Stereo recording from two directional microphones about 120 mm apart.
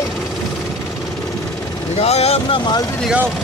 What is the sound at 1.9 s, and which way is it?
Speech, 60° left (ahead or behind).